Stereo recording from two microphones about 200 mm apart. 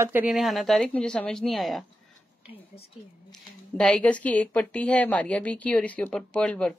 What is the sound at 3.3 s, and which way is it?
A woman's voice, 5° left (ahead or behind).